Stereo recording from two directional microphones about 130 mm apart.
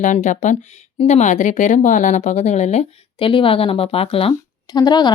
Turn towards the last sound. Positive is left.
turn(degrees=35)  # may be behind; listen again after turning